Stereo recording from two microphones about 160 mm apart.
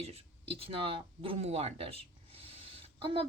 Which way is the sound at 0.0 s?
40° right (ahead or behind).